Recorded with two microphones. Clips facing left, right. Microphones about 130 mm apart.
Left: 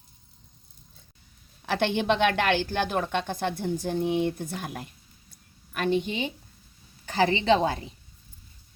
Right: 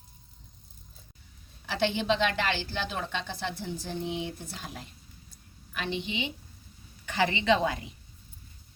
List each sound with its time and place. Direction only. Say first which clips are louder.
1.6 s a woman's voice: left 3 dB; 60° left (ahead or behind); by 7.9 s 35° left (ahead or behind)